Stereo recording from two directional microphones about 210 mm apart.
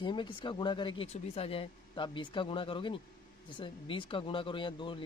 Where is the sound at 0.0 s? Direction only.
25° left (ahead or behind).